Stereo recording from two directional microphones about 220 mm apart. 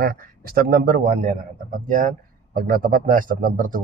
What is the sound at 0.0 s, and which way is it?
A man's voice, 40° right (ahead or behind).